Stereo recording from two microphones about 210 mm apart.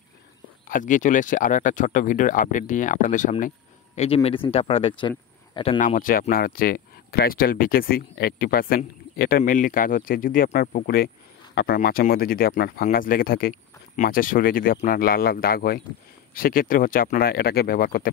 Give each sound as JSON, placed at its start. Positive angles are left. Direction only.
{"t": 0.7, "sound": "speech", "side_deg": 40}
{"t": 5.8, "sound": "speech", "side_deg": 40}